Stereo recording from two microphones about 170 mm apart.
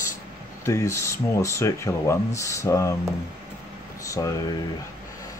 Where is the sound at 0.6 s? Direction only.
15° left (ahead or behind).